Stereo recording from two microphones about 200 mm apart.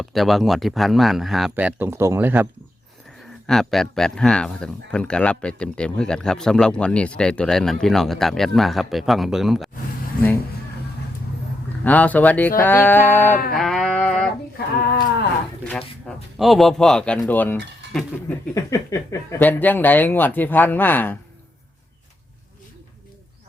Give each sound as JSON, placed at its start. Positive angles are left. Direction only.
{"t": 0.0, "sound": "speech", "side_deg": 0}
{"t": 3.4, "sound": "speech", "side_deg": 0}
{"t": 10.1, "sound": "speech", "side_deg": 45}
{"t": 11.9, "sound": "speech", "side_deg": 10}
{"t": 13.6, "sound": "a sound", "side_deg": 0}
{"t": 16.0, "sound": "speech", "side_deg": 0}